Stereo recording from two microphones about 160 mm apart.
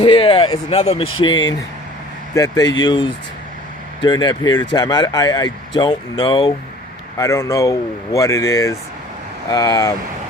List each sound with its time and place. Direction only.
0.0 s speech: 35° left (ahead or behind)